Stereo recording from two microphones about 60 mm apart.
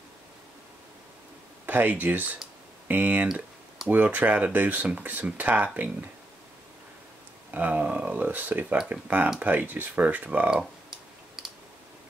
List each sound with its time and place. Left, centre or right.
1.7 s speech: right
7.5 s speech: right